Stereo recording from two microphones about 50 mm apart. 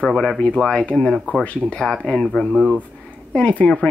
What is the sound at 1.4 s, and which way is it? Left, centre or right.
Speech, left.